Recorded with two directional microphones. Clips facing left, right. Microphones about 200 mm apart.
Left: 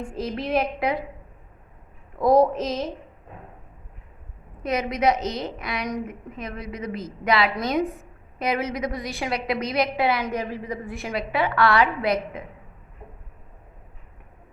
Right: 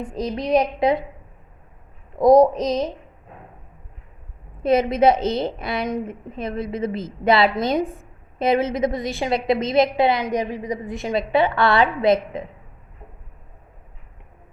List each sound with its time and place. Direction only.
0.0 s a woman's voice: 15° right (ahead or behind)
2.1 s a woman's voice: 15° right (ahead or behind)
4.6 s a woman's voice: 30° right (ahead or behind)